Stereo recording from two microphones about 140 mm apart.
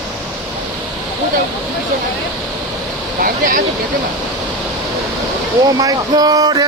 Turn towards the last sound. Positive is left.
turn(degrees=-30)  # may be behind; listen again after turning